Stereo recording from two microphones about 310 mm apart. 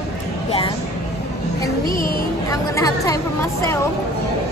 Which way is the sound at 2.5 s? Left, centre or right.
Centre.